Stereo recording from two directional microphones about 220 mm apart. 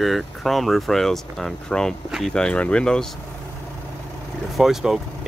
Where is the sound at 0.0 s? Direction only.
Centre (ahead or behind).